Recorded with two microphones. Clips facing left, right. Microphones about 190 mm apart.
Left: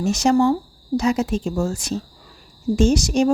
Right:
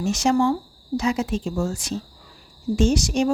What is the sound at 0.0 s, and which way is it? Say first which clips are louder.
A woman's voice: left 3 dB; 40° left (ahead or behind).